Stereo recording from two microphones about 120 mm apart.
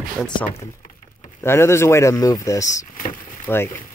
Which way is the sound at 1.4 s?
20° left (ahead or behind).